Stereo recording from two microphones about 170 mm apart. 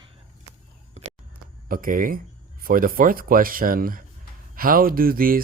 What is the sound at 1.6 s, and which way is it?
Speech, 55° right (ahead or behind).